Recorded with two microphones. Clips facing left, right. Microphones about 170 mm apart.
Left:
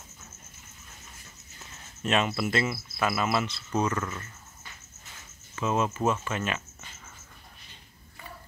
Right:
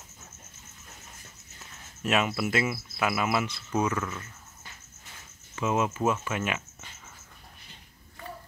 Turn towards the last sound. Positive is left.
turn(degrees=-15)  # may be behind; listen again after turning